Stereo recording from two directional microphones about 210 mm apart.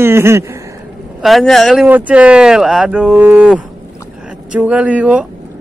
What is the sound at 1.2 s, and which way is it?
Speech, centre (ahead or behind).